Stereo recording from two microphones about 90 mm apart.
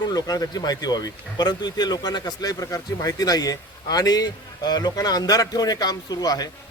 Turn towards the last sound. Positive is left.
turn(degrees=45)  # may be behind; listen again after turning